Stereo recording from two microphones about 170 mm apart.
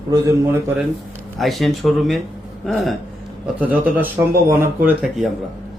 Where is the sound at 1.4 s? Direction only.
Centre (ahead or behind).